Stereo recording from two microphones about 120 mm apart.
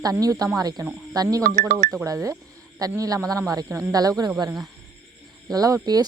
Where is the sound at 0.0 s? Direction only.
30° right (ahead or behind).